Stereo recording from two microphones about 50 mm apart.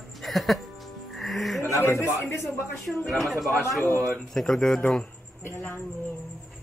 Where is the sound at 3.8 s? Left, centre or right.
Left.